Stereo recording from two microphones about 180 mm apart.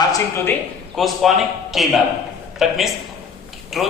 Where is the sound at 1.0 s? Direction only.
Centre (ahead or behind).